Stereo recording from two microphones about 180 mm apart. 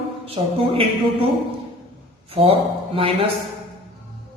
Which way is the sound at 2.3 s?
30° right (ahead or behind).